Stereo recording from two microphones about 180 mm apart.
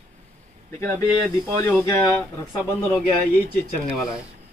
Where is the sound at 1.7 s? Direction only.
10° left (ahead or behind).